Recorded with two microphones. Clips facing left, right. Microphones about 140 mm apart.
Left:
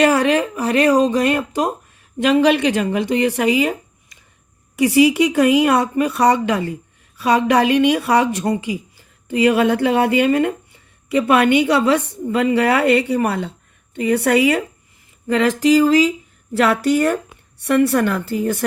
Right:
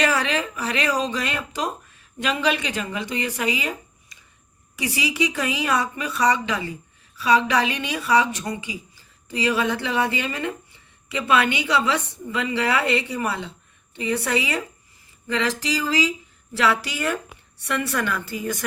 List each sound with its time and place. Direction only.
0.0 s a woman's voice: 55° left (ahead or behind)
15.3 s a woman's voice: 50° left (ahead or behind)